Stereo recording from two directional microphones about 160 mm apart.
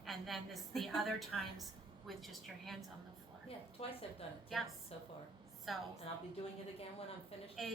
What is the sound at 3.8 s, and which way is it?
Speech, 40° left (ahead or behind).